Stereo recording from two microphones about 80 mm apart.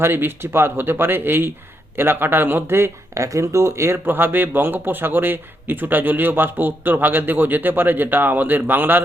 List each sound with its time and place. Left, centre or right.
0.0 s speech: right